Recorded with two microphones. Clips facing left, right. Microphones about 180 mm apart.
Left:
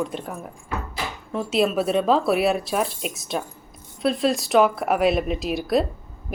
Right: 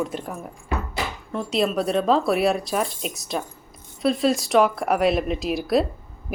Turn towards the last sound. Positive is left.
turn(degrees=0)  # may be behind; listen again after turning